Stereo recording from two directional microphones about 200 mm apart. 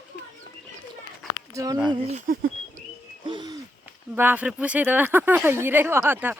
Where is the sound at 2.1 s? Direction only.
35° right (ahead or behind).